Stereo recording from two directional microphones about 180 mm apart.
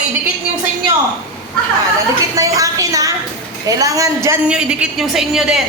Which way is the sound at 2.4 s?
20° right (ahead or behind).